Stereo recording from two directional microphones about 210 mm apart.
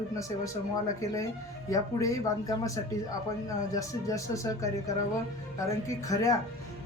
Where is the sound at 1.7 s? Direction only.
15° left (ahead or behind).